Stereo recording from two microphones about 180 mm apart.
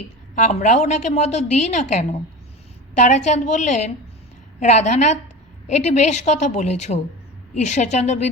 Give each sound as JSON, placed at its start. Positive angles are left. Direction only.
{"t": 0.3, "sound": "a woman's voice", "side_deg": 40}